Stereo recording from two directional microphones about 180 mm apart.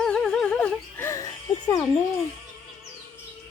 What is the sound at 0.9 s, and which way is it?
Music, 15° left (ahead or behind).